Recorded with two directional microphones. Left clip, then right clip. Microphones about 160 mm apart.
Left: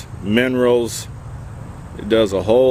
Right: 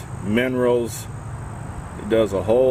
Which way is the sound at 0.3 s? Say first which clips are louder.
Left 4 dB; 35° left (ahead or behind).